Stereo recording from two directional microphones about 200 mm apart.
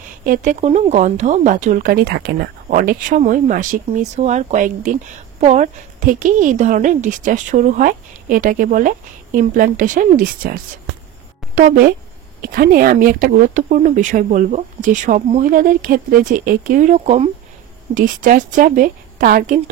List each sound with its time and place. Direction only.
0.2 s a woman's voice: 40° right (ahead or behind)